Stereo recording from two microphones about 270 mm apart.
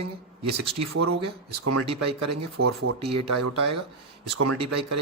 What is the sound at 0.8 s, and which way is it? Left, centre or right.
Speech, right.